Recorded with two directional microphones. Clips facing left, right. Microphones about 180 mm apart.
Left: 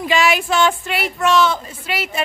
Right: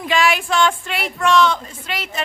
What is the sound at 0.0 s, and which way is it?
A woman's voice, centre (ahead or behind).